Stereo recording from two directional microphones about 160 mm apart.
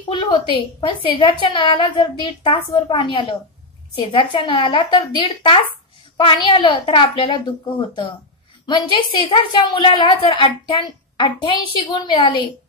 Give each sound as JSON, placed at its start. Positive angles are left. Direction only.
{"t": 0.1, "sound": "a woman's voice", "side_deg": 30}